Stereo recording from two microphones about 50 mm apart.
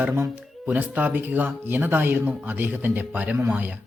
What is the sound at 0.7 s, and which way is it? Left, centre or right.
A man's voice, right.